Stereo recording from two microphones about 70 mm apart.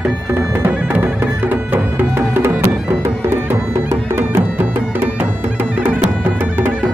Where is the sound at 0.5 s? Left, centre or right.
Right.